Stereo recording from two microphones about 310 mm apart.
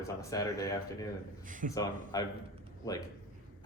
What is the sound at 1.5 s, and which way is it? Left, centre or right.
Speech, right.